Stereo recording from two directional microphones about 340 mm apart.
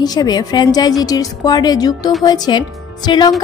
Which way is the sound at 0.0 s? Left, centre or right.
Centre.